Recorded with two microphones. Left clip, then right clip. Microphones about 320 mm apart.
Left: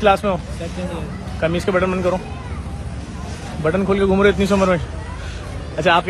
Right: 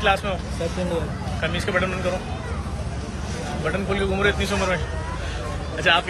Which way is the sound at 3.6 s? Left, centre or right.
Centre.